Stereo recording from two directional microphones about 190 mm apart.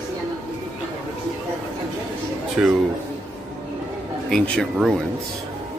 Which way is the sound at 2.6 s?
5° right (ahead or behind).